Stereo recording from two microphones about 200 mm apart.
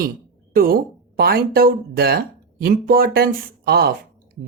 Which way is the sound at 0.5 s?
45° right (ahead or behind).